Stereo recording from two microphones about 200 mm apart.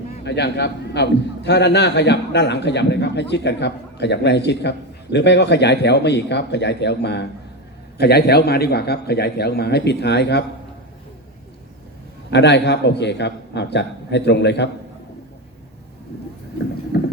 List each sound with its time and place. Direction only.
0.3 s a man's voice: 60° left (ahead or behind)
12.3 s a man's voice: 60° left (ahead or behind)
16.9 s clip-clop: 55° left (ahead or behind)